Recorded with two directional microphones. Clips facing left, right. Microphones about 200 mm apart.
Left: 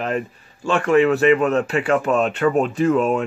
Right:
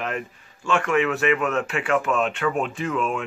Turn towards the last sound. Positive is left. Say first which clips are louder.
# left 8 dB
turn(degrees=40)  # may be behind; listen again after turning